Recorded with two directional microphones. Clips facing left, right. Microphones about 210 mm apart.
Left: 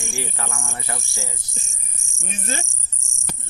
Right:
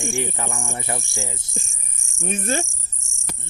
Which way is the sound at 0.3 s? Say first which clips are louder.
Right 3 dB; 20° right (ahead or behind).